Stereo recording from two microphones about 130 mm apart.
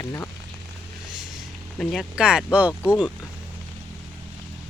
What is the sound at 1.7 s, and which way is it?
Speech, centre (ahead or behind).